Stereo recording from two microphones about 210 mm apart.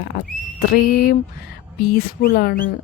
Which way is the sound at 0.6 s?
50° left (ahead or behind).